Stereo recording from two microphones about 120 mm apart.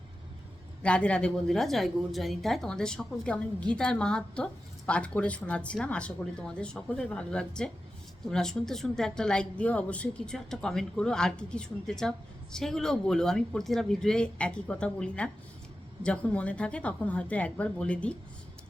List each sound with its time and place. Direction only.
0.8 s a woman's voice: 10° left (ahead or behind)